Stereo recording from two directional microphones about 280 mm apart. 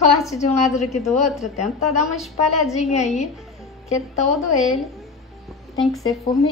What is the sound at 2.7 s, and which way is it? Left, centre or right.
Speech, left.